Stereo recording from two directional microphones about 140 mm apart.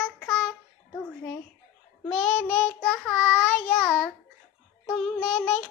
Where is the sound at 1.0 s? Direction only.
15° left (ahead or behind).